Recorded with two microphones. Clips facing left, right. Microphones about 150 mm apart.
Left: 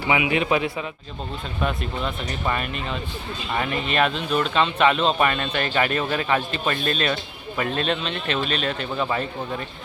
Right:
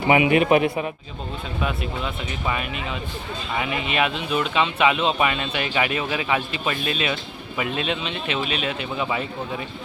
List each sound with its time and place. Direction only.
0.1 s a man's voice: 45° right (ahead or behind)
1.6 s speech: 5° right (ahead or behind)